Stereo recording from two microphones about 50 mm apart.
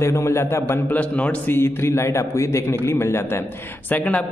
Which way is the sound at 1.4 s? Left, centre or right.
Left.